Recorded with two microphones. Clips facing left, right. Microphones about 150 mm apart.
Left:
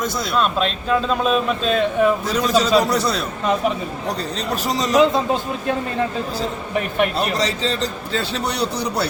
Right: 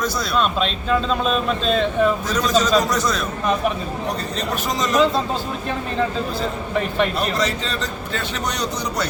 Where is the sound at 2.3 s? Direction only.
30° left (ahead or behind).